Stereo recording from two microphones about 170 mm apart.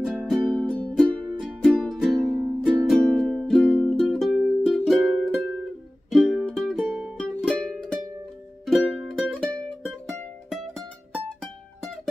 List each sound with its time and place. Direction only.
0.0 s music: centre (ahead or behind)
8.6 s music: centre (ahead or behind)